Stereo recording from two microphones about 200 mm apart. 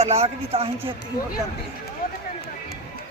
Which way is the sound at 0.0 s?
30° right (ahead or behind).